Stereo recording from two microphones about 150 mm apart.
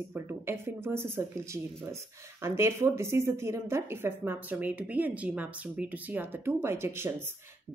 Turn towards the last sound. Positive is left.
turn(degrees=-15)  # may be behind; listen again after turning